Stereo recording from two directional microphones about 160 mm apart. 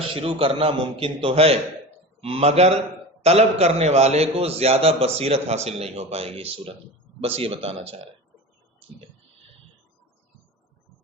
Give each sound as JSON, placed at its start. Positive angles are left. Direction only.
{"t": 0.0, "sound": "a man's voice", "side_deg": -35}